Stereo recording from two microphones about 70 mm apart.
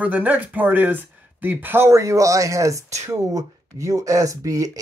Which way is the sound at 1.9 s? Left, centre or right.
Right.